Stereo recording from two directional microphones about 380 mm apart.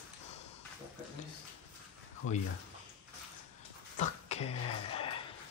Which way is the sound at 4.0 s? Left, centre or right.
Centre.